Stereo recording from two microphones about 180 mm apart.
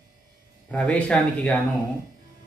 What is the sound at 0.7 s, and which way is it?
Speech, 10° left (ahead or behind).